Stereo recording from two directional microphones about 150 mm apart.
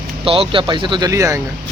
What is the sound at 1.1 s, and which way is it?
Speech, 20° right (ahead or behind).